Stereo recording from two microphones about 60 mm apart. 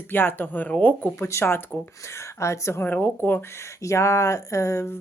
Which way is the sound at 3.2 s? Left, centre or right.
Left.